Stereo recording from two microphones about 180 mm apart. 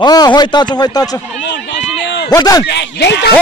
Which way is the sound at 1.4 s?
80° left.